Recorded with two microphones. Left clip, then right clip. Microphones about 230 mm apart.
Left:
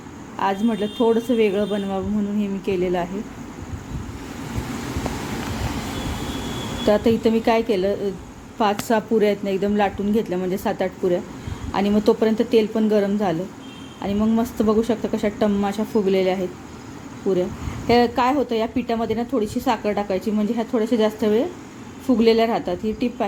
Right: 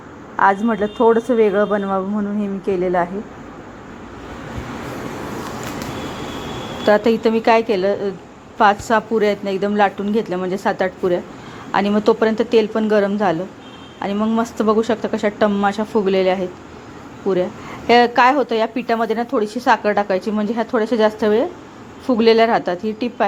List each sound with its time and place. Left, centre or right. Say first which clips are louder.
0.3 s speech: right 7 dB; centre
2.4 s a woman's voice: right 4 dB; right
6.8 s a woman's voice: right 4 dB; centre
8.9 s a woman's voice: right 3 dB; centre
17.8 s a woman's voice: right 6 dB; centre